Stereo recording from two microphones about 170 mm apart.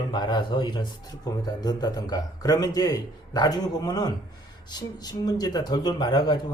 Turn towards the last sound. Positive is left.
turn(degrees=25)  # may be behind; listen again after turning